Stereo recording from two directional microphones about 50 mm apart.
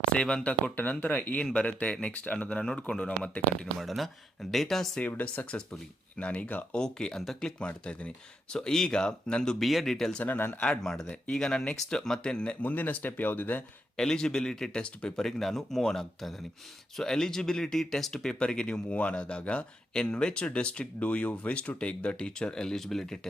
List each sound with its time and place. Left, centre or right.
0.1 s speech: centre
0.8 s speech: left
1.6 s speech: left
3.8 s speech: centre
5.0 s speech: left
6.7 s speech: centre
7.7 s speech: left
8.5 s speech: centre
10.2 s speech: left
11.1 s speech: centre
12.6 s speech: left
13.9 s speech: centre